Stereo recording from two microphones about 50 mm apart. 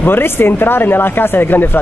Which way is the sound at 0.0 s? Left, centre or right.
Left.